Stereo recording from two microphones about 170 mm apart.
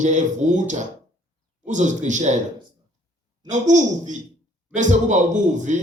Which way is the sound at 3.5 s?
45° right (ahead or behind).